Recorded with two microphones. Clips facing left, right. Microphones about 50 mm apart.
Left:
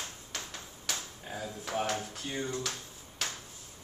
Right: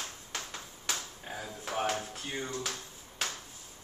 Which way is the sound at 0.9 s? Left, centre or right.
Centre.